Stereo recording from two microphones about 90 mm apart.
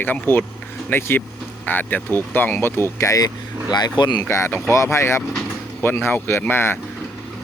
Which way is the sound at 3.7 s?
55° left (ahead or behind).